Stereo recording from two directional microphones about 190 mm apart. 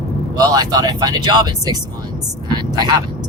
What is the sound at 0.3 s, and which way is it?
Speech, 20° right (ahead or behind).